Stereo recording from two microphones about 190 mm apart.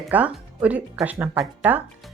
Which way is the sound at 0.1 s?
5° right (ahead or behind).